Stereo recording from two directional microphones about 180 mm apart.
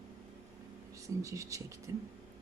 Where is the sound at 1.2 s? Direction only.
15° right (ahead or behind).